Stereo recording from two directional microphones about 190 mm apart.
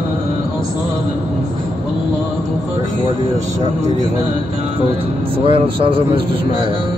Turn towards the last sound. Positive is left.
turn(degrees=-30)  # may be behind; listen again after turning